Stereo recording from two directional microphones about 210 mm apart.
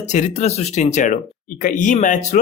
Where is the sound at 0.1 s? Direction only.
35° left (ahead or behind).